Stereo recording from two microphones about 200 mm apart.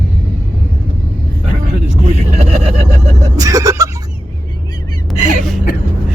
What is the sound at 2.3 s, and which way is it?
Speech, 30° right (ahead or behind).